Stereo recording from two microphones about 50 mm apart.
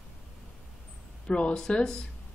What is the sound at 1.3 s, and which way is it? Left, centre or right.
Speech, left.